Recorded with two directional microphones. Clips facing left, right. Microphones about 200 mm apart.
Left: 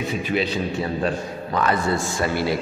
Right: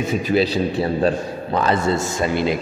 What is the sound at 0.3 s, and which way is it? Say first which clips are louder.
A man's voice: right 6 dB; 35° right (ahead or behind).